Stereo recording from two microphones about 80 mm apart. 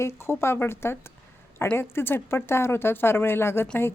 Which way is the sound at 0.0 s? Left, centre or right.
Left.